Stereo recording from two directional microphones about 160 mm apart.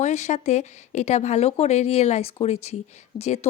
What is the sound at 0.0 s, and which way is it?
Speech, 45° left (ahead or behind).